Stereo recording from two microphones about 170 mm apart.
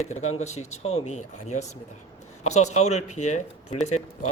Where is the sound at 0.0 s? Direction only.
40° left (ahead or behind).